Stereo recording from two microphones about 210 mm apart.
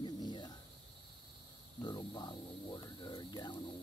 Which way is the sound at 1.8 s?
20° left (ahead or behind).